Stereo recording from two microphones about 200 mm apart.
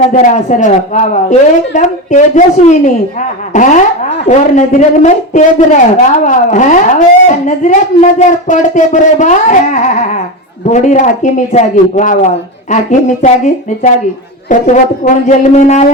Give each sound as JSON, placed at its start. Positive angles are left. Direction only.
{"t": 0.1, "sound": "speech", "side_deg": 40}